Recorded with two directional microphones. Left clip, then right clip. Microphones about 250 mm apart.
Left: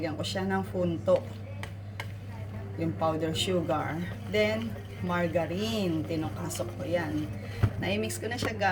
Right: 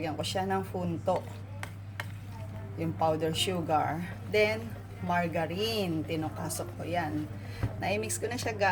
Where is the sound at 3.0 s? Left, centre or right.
Right.